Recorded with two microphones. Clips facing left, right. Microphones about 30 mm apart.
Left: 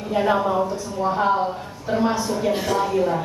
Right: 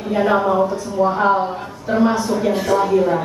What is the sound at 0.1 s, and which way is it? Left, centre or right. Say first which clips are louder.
Speech: right 3 dB; centre.